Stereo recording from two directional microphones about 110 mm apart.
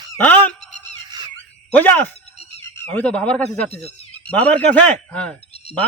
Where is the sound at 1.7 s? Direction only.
15° left (ahead or behind).